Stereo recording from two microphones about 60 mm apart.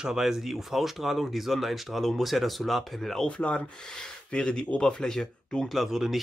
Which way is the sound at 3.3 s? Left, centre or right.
Centre.